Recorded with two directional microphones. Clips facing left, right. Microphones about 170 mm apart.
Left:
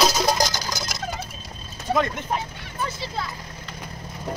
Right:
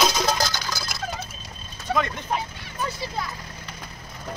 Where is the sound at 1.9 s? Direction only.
10° left (ahead or behind).